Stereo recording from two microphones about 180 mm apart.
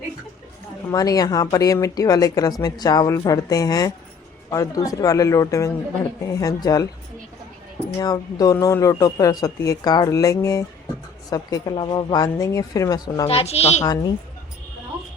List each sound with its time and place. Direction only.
0.9 s speech: 20° left (ahead or behind)
7.9 s speech: 20° left (ahead or behind)
13.2 s a woman's voice: 35° left (ahead or behind)
13.8 s speech: 20° left (ahead or behind)